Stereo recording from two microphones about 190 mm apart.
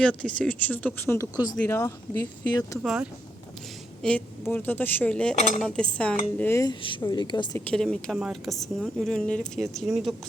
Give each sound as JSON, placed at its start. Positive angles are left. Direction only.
{"t": 0.0, "sound": "speech", "side_deg": 5}
{"t": 2.8, "sound": "speech", "side_deg": -5}
{"t": 4.0, "sound": "speech", "side_deg": 10}
{"t": 7.6, "sound": "speech", "side_deg": 5}